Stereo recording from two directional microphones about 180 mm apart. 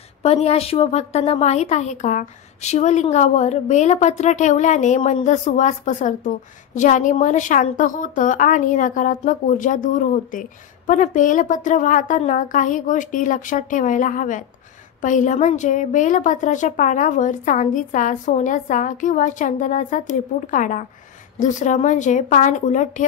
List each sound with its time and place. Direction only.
0.2 s a woman's voice: 35° left (ahead or behind)